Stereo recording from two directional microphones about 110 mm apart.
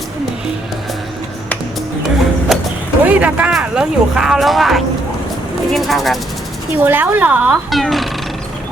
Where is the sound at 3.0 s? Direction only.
10° right (ahead or behind).